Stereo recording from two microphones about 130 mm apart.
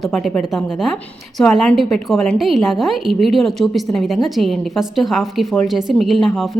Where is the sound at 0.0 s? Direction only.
Centre (ahead or behind).